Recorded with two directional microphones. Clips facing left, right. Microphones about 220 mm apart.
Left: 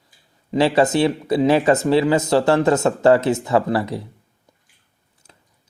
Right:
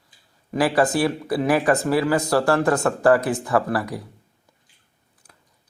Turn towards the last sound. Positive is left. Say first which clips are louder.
# left 3 dB
turn(degrees=25)  # may be behind; listen again after turning